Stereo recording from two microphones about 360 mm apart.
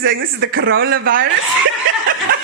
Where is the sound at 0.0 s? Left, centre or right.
Right.